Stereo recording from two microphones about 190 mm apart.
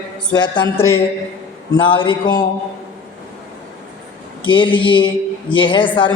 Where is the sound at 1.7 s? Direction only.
25° left (ahead or behind).